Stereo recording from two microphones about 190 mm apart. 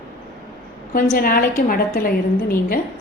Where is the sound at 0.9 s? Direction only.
50° left (ahead or behind).